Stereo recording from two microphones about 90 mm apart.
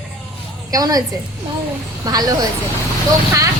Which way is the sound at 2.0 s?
45° right (ahead or behind).